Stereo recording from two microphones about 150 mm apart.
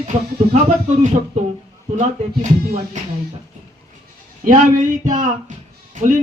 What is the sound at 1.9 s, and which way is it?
Speech, 50° right (ahead or behind).